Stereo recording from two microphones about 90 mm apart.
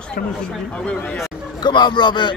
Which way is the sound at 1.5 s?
55° left (ahead or behind).